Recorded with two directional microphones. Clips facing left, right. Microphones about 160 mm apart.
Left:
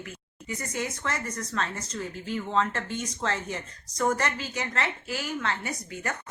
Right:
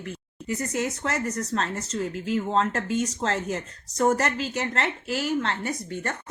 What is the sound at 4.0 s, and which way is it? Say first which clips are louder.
Speech: right 4 dB; 40° right (ahead or behind).